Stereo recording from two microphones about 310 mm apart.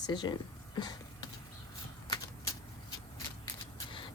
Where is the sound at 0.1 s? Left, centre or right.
Centre.